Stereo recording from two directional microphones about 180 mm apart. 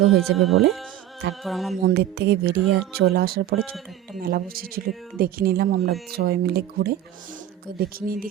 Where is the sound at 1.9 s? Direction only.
65° right (ahead or behind).